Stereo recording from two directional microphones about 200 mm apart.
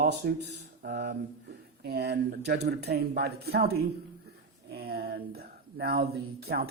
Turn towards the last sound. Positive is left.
turn(degrees=-50)  # may be behind; listen again after turning